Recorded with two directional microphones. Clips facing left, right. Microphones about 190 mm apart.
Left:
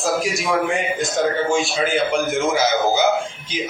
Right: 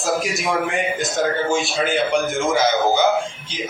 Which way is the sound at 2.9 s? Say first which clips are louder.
Even; 10° left (ahead or behind).